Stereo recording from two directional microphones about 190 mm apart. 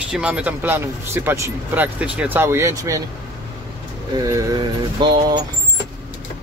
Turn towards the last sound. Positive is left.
turn(degrees=-25)  # may be behind; listen again after turning